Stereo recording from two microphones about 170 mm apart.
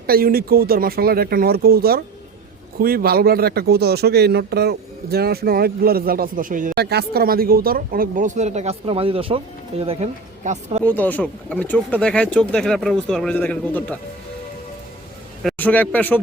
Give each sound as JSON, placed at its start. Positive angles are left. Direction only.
{"t": 0.1, "sound": "speech", "side_deg": -60}
{"t": 6.7, "sound": "speech", "side_deg": -70}
{"t": 10.8, "sound": "speech", "side_deg": 10}
{"t": 15.4, "sound": "speech", "side_deg": 10}